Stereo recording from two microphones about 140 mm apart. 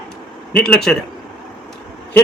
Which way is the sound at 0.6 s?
5° left (ahead or behind).